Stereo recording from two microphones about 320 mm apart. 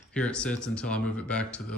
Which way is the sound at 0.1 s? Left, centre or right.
Centre.